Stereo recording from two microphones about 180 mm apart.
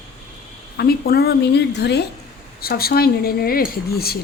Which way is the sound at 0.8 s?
60° left (ahead or behind).